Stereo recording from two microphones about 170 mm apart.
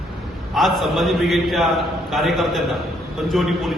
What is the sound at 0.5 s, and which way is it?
A man's voice, centre (ahead or behind).